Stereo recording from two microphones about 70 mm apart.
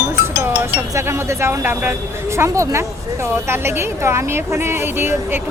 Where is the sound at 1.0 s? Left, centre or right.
Right.